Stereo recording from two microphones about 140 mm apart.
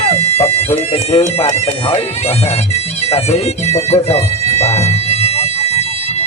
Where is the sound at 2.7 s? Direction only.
45° left (ahead or behind).